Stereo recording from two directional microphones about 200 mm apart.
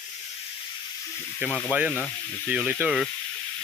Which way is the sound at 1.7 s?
5° right (ahead or behind).